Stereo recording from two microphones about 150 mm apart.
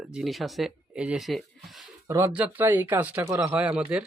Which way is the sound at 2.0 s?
20° right (ahead or behind).